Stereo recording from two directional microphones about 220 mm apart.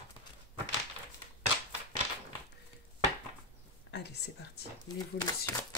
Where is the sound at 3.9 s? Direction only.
50° left (ahead or behind).